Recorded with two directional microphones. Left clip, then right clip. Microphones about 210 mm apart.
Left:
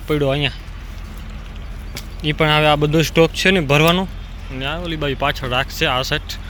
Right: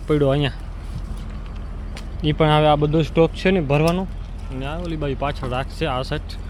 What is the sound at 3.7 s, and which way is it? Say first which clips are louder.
Speech: left 5 dB; 5° left (ahead or behind).